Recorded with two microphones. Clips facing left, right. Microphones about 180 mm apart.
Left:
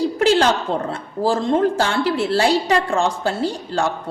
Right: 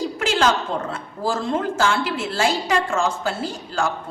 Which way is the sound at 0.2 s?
35° left (ahead or behind).